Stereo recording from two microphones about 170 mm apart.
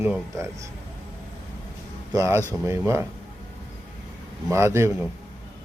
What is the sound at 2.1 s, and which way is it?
Speech, 20° right (ahead or behind).